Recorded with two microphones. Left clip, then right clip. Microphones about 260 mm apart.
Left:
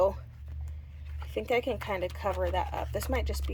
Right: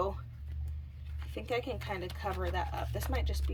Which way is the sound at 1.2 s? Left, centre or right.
Centre.